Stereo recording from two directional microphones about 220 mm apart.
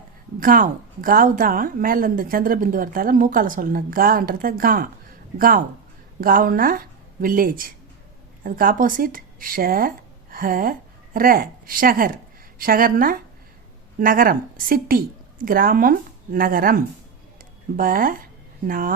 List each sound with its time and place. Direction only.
0.3 s a woman's voice: 40° right (ahead or behind)
17.3 s a sound: 40° right (ahead or behind)
18.7 s a woman's voice: 40° right (ahead or behind)